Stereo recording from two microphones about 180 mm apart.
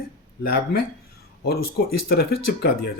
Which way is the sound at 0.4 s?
55° left (ahead or behind).